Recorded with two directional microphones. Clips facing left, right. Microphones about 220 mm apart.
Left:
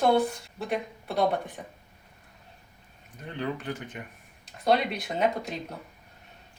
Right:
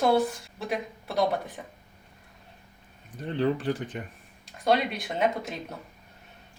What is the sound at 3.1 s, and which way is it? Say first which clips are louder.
Speech: right 6 dB; 35° right (ahead or behind).